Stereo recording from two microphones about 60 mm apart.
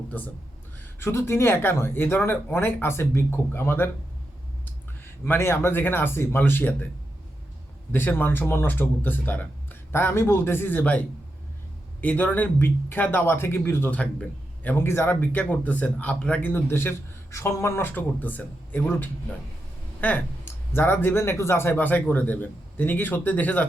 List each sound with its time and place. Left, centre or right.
0.1 s speech: left
0.9 s speech: left
5.2 s speech: left
7.9 s speech: left
13.9 s speech: left
14.8 s speech: left
16.4 s a man's voice: left
17.8 s speech: left
21.8 s speech: left